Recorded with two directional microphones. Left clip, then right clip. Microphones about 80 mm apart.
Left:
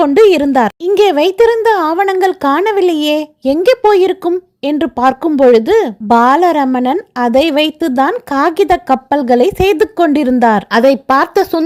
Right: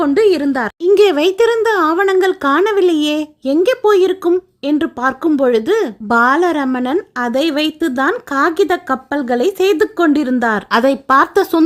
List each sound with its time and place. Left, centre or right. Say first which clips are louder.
0.0 s a woman's voice: left 5 dB; left
0.9 s speech: left 3 dB; left
10.7 s speech: left 3 dB; left